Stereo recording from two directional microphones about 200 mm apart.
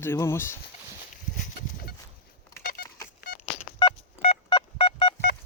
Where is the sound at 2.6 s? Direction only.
45° left (ahead or behind).